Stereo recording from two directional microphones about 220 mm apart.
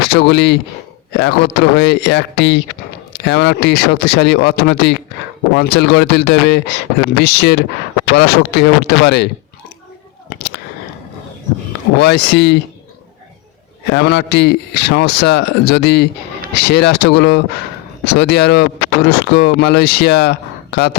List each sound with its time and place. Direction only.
0.1 s speech: 50° left (ahead or behind)
10.2 s a sound: 50° left (ahead or behind)
11.9 s speech: 50° left (ahead or behind)
13.9 s speech: 50° left (ahead or behind)